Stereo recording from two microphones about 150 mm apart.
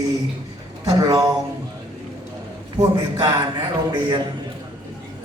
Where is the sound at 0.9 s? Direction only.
25° right (ahead or behind).